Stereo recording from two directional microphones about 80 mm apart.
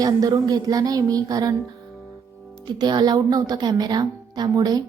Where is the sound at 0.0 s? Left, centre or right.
Right.